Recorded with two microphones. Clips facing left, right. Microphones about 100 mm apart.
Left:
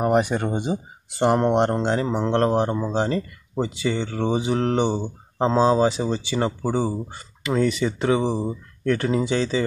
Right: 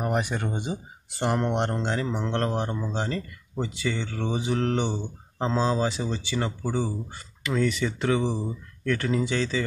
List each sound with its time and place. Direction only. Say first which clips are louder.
0.0 s speech: left 7 dB; 25° left (ahead or behind)
7.4 s speech: left 4 dB; 20° left (ahead or behind)